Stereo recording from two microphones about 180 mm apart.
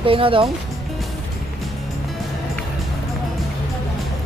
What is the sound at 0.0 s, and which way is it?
Speech, 30° right (ahead or behind).